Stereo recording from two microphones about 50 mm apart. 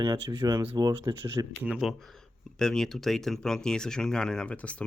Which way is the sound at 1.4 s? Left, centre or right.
Right.